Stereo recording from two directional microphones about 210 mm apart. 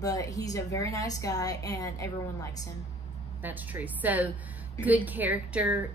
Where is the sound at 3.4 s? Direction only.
10° right (ahead or behind).